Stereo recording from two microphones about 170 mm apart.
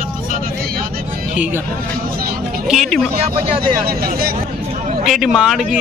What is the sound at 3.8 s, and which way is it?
Speech, 60° right (ahead or behind).